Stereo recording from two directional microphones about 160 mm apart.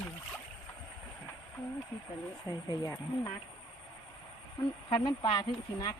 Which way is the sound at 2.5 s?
20° left (ahead or behind).